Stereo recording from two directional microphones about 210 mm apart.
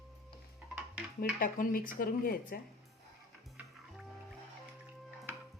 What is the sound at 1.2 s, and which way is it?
Speech, 40° left (ahead or behind).